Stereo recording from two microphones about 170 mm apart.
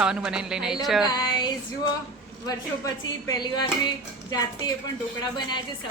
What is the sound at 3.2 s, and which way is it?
Music, 25° left (ahead or behind).